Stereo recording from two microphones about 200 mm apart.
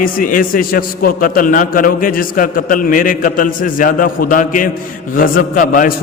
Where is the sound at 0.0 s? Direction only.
45° left (ahead or behind).